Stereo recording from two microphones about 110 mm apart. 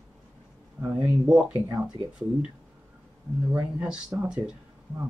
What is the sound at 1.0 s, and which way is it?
Speech, 10° right (ahead or behind).